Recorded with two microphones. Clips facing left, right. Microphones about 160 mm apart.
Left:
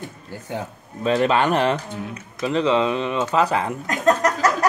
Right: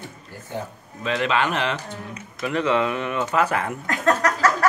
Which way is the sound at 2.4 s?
25° left (ahead or behind).